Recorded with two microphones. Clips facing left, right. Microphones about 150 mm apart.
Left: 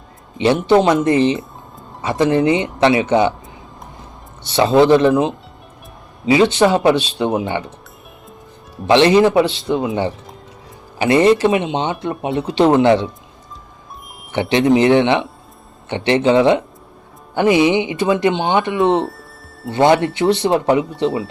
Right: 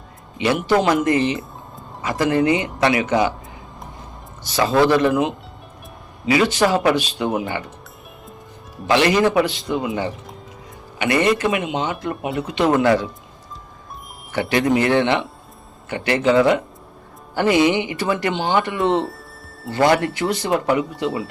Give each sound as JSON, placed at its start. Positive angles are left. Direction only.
{"t": 0.3, "sound": "speech", "side_deg": 25}
{"t": 4.4, "sound": "speech", "side_deg": 25}
{"t": 8.9, "sound": "speech", "side_deg": 25}
{"t": 14.5, "sound": "speech", "side_deg": 20}
{"t": 19.0, "sound": "music", "side_deg": 0}
{"t": 19.6, "sound": "speech", "side_deg": 25}